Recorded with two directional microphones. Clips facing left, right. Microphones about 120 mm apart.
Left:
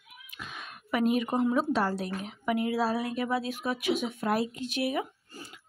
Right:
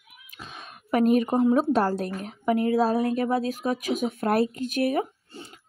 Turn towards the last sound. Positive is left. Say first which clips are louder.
# right 6 dB
turn(degrees=-45)  # may be behind; listen again after turning